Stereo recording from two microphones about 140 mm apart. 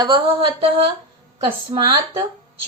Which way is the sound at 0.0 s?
35° right (ahead or behind).